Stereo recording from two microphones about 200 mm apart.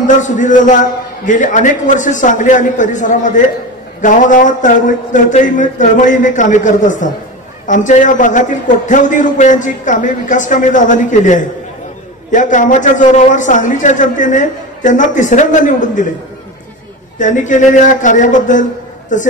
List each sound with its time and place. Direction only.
0.0 s a man's voice: 40° left (ahead or behind)
17.2 s a man's voice: 40° left (ahead or behind)